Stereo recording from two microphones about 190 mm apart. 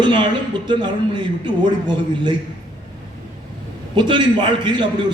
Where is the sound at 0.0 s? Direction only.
25° right (ahead or behind).